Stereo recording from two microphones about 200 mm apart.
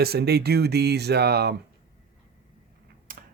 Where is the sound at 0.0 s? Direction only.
55° right (ahead or behind).